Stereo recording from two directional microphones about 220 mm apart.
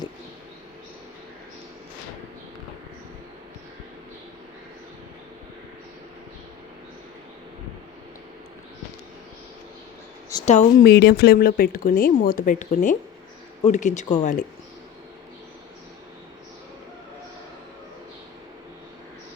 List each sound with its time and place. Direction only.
10.4 s speech: 30° left (ahead or behind)
10.8 s speech: 45° left (ahead or behind)